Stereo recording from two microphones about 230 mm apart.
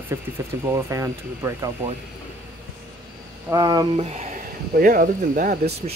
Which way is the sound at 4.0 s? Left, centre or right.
Right.